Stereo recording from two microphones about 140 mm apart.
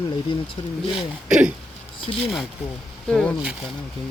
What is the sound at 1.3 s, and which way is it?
Speech, 5° right (ahead or behind).